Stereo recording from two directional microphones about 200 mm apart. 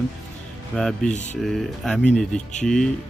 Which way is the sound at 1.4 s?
Centre (ahead or behind).